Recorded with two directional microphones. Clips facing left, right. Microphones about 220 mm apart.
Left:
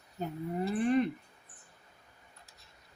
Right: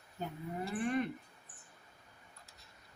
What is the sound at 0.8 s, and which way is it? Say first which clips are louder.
Speech: left 6 dB; 30° left (ahead or behind).